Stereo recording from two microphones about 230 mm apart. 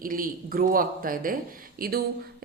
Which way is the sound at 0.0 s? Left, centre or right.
Right.